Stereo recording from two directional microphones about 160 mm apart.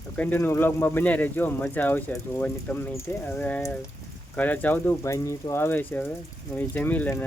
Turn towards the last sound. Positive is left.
turn(degrees=10)  # may be behind; listen again after turning